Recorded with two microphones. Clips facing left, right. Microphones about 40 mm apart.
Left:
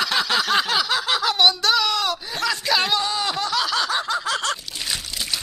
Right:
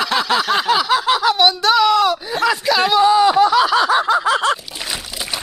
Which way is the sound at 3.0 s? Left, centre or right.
Centre.